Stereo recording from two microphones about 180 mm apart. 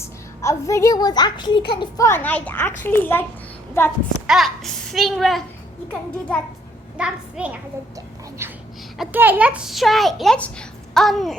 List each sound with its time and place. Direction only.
0.0 s a woman's voice: 15° left (ahead or behind)
2.0 s a child's voice: 10° left (ahead or behind)
4.3 s a child's voice: centre (ahead or behind)
6.9 s a woman's voice: 5° right (ahead or behind)